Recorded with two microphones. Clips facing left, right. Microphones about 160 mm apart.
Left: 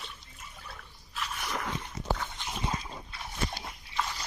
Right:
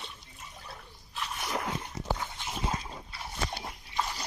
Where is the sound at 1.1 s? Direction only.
30° right (ahead or behind).